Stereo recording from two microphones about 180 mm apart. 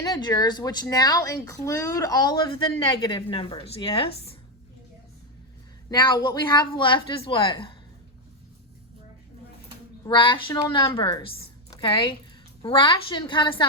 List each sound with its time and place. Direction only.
0.0 s speech: 20° left (ahead or behind)
5.9 s speech: 25° left (ahead or behind)
10.0 s a woman's voice: 25° left (ahead or behind)